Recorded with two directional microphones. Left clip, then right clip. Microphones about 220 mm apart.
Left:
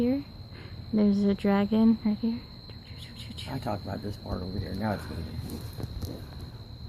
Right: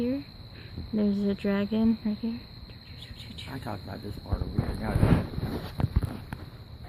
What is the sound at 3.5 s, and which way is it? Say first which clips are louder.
Speech: left 5 dB; 40° left (ahead or behind).